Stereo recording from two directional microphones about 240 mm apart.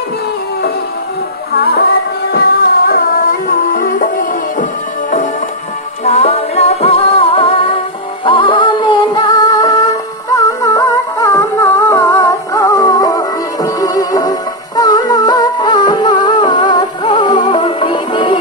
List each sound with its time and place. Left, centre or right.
1.5 s music: left
2.9 s music: left
6.0 s music: left